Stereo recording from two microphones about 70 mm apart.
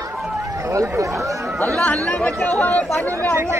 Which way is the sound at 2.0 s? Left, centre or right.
Centre.